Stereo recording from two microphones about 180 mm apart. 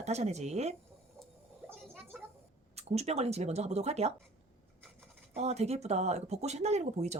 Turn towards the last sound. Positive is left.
turn(degrees=-40)  # may be behind; listen again after turning